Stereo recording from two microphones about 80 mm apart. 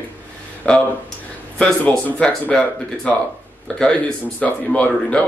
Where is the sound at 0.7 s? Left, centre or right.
Centre.